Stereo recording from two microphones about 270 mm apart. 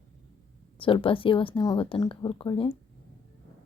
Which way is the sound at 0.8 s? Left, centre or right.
Centre.